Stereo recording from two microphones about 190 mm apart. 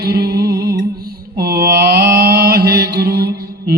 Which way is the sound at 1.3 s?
55° right (ahead or behind).